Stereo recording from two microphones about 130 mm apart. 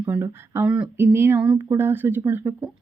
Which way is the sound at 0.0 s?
15° right (ahead or behind).